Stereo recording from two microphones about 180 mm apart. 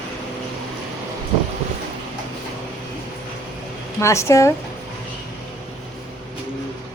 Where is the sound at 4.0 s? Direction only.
15° left (ahead or behind).